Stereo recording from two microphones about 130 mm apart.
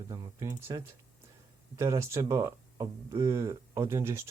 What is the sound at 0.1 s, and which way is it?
Speech, 25° right (ahead or behind).